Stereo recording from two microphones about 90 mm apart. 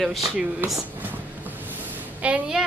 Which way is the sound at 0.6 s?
20° right (ahead or behind).